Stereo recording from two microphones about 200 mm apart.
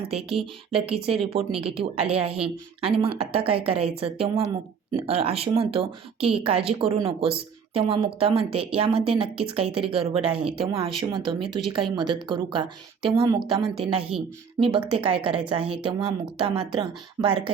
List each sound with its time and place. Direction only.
0.3 s speech: 30° right (ahead or behind)
14.1 s speech: centre (ahead or behind)
14.6 s speech: 25° right (ahead or behind)